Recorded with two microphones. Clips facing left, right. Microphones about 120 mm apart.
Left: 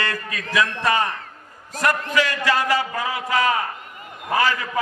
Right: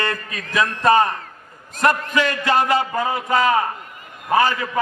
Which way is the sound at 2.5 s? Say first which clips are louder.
Right 3 dB; 55° right (ahead or behind).